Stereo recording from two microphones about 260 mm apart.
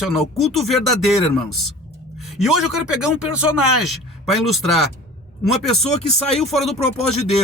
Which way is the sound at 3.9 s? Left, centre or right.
Centre.